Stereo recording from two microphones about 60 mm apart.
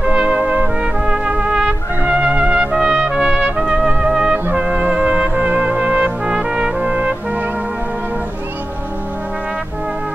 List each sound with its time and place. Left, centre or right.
0.0 s brass instrument: centre
1.1 s trumpet: centre
3.5 s brass instrument: centre